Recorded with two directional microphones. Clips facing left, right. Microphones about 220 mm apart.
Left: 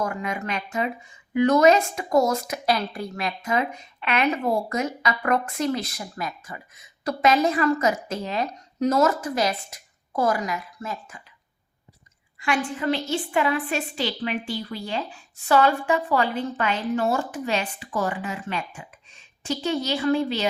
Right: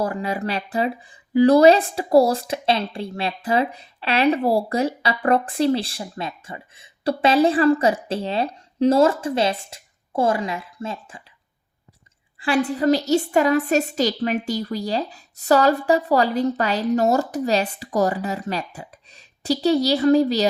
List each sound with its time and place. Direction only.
0.0 s speech: 35° right (ahead or behind)
12.4 s speech: 35° right (ahead or behind)